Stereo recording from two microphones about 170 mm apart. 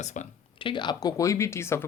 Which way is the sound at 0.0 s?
45° left (ahead or behind).